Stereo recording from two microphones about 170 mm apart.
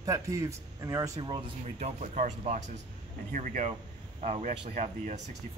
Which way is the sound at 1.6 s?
40° right (ahead or behind).